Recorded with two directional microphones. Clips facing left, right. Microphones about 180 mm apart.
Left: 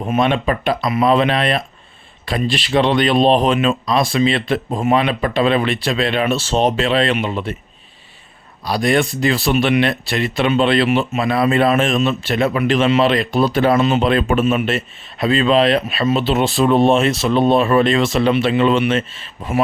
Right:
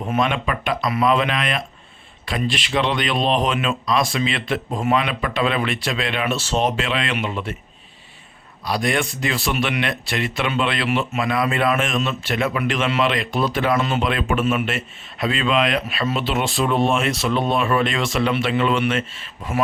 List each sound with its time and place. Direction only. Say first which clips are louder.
0.0 s speech: left 5 dB; 30° left (ahead or behind)
8.6 s speech: left 5 dB; 35° left (ahead or behind)